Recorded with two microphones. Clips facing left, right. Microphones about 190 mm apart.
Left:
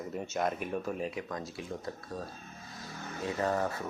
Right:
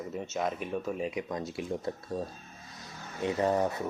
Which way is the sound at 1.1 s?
15° right (ahead or behind).